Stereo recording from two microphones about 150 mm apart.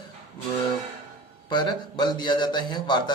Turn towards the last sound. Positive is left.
turn(degrees=30)  # may be behind; listen again after turning